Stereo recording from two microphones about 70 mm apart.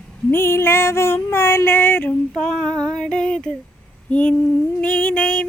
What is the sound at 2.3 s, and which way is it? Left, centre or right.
Female singing, centre.